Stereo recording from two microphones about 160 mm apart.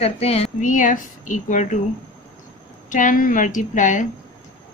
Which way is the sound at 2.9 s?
55° left (ahead or behind).